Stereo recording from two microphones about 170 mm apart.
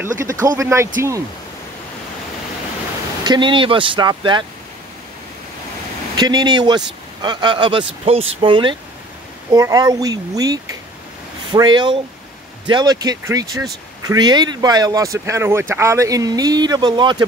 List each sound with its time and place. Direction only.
0.0 s speech: 15° right (ahead or behind)
3.3 s speech: 30° right (ahead or behind)
6.1 s speech: 25° right (ahead or behind)